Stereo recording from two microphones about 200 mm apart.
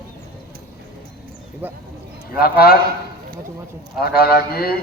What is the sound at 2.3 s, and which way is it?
Speech, 50° left (ahead or behind).